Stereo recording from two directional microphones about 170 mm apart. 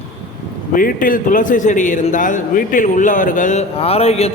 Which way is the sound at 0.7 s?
55° left (ahead or behind).